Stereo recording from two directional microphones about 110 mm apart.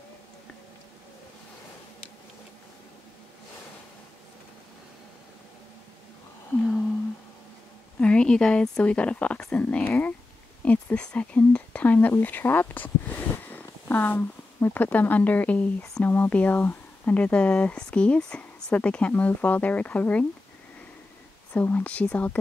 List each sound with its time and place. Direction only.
8.0 s speech: 10° left (ahead or behind)
21.5 s speech: 15° left (ahead or behind)